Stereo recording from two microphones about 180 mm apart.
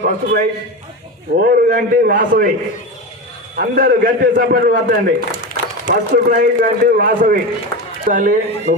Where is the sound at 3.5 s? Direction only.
55° right (ahead or behind).